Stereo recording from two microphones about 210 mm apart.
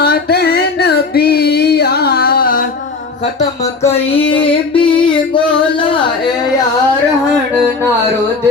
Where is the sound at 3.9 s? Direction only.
25° left (ahead or behind).